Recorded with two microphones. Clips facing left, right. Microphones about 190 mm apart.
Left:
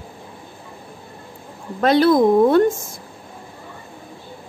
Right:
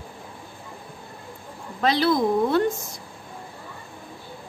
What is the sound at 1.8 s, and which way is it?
Speech, 50° left (ahead or behind).